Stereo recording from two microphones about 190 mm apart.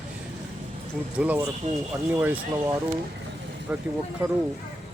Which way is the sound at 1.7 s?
40° right (ahead or behind).